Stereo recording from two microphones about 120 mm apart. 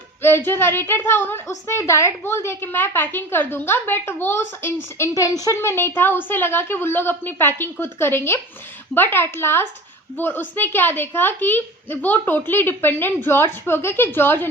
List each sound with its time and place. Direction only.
0.2 s a woman's voice: 20° left (ahead or behind)
5.5 s a woman's voice: 20° left (ahead or behind)